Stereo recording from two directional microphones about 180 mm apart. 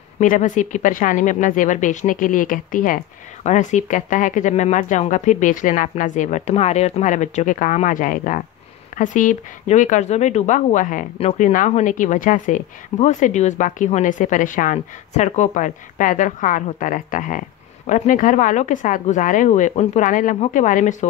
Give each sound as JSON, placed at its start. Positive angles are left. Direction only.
{"t": 0.2, "sound": "speech", "side_deg": 45}